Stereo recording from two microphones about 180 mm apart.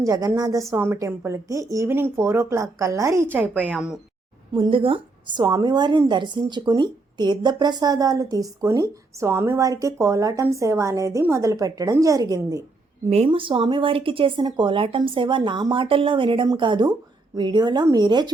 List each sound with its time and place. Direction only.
0.0 s speech: 20° right (ahead or behind)
4.5 s speech: 30° right (ahead or behind)
13.1 s speech: 30° right (ahead or behind)